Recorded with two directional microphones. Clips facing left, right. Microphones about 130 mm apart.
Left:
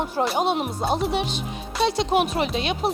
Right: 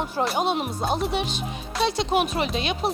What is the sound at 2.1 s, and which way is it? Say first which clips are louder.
Speech: left 2 dB; 45° left (ahead or behind).